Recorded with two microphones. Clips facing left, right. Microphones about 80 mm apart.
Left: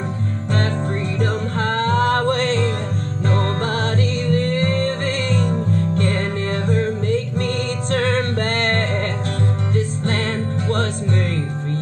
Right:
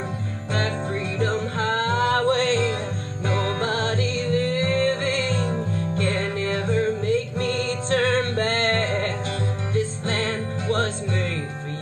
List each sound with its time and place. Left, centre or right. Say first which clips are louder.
1.2 s music: left 1 dB; left